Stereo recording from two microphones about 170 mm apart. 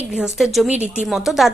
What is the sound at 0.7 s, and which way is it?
Speech, 40° right (ahead or behind).